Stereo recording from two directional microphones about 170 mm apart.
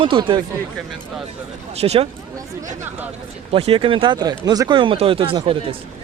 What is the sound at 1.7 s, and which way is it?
Speech, 35° right (ahead or behind).